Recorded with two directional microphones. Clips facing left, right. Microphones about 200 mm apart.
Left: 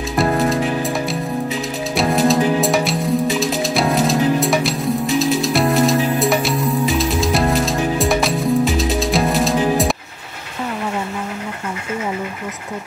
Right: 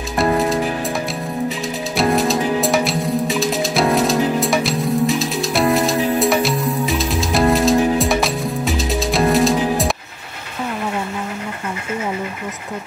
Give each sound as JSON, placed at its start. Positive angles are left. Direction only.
{"t": 0.2, "sound": "music", "side_deg": 0}
{"t": 2.0, "sound": "music", "side_deg": 0}